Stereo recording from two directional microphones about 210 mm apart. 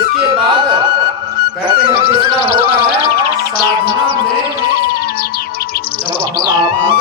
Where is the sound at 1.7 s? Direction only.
45° left (ahead or behind).